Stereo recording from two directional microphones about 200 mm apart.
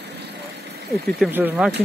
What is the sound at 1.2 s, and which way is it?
Speech, 10° right (ahead or behind).